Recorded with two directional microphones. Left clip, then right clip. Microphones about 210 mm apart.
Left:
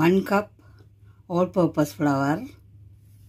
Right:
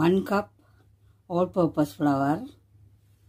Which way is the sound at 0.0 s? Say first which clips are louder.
Left 3 dB; 10° left (ahead or behind).